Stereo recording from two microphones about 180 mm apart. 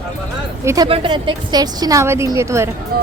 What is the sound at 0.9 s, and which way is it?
A woman's voice, 30° right (ahead or behind).